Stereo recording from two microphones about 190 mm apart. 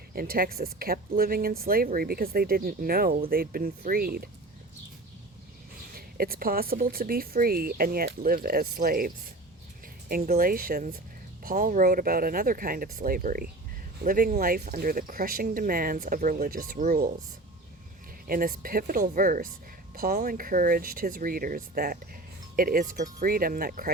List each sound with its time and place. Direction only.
0.1 s speech: 50° right (ahead or behind)
5.9 s speech: 50° right (ahead or behind)
18.3 s speech: 50° right (ahead or behind)